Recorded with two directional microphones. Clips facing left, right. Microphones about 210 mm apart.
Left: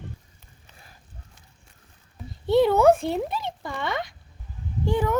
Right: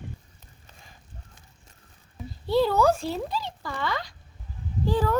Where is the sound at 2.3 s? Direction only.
20° left (ahead or behind).